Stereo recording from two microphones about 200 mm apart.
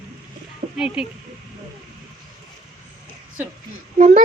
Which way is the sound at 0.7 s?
5° right (ahead or behind).